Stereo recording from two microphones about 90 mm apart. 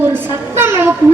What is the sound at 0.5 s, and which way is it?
Speech, 25° right (ahead or behind).